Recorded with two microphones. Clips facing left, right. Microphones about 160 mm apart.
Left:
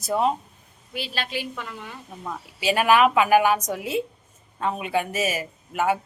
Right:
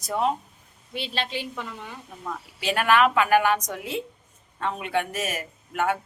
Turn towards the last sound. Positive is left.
turn(degrees=5)  # may be behind; listen again after turning